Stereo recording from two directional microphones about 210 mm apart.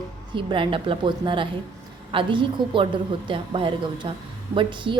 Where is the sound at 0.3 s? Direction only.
25° right (ahead or behind).